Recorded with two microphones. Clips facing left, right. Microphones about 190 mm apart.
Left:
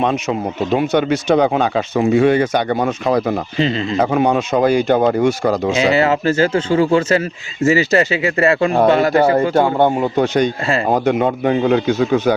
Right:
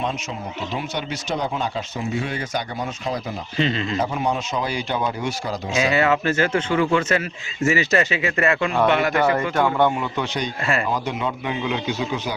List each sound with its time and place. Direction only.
0.0 s speech: 65° left (ahead or behind)
3.6 s a man's voice: 30° left (ahead or behind)
3.9 s speech: 65° left (ahead or behind)
5.7 s a man's voice: 30° left (ahead or behind); by 12.3 s 50° left (ahead or behind)